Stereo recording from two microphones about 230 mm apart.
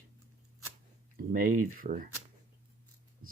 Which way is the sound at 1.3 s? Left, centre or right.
Right.